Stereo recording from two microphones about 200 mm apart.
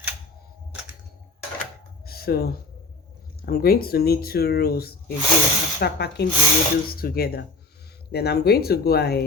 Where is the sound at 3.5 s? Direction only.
50° left (ahead or behind).